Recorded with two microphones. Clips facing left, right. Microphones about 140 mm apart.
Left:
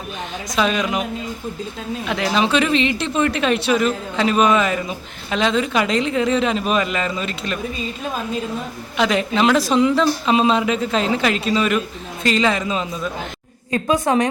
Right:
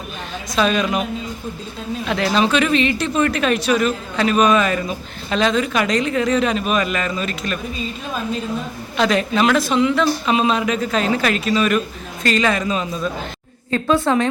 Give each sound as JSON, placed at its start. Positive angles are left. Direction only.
{"t": 0.5, "sound": "a woman's voice", "side_deg": 15}
{"t": 2.0, "sound": "a woman's voice", "side_deg": 15}
{"t": 9.0, "sound": "a woman's voice", "side_deg": 20}
{"t": 9.6, "sound": "a woman's voice", "side_deg": 35}